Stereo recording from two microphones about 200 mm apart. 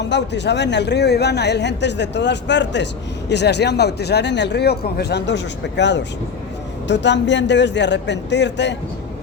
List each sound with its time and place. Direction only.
0.0 s speech: 60° left (ahead or behind)